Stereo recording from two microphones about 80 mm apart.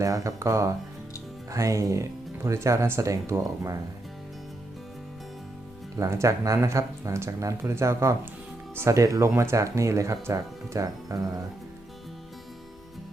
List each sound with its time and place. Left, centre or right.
0.0 s speech: right
6.0 s speech: right